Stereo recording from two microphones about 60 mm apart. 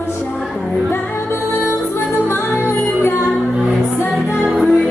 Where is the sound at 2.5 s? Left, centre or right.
Left.